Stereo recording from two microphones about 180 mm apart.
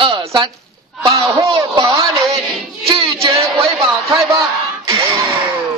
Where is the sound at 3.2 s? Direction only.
20° right (ahead or behind).